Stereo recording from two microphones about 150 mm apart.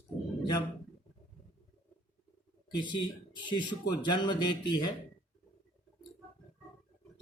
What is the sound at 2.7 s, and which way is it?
Speech, 30° left (ahead or behind).